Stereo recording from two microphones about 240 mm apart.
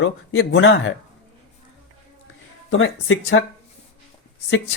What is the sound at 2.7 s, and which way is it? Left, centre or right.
Speech, left.